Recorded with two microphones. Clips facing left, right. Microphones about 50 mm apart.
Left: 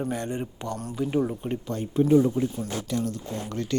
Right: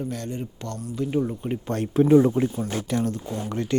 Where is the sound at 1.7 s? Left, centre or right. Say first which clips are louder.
Right 3 dB; right.